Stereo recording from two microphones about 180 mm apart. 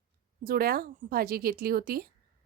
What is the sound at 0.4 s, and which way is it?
Speech, 55° right (ahead or behind).